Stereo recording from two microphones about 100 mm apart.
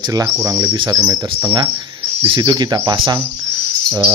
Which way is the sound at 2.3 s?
45° right (ahead or behind).